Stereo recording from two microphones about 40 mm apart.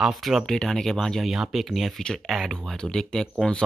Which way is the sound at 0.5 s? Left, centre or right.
Centre.